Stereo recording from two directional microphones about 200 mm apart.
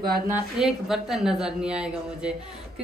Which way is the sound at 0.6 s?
Centre (ahead or behind).